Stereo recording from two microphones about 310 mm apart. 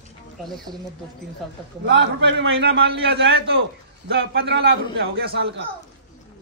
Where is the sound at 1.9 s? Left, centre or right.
Right.